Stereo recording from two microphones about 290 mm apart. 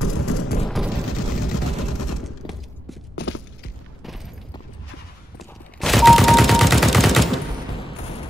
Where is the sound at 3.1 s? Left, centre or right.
Left.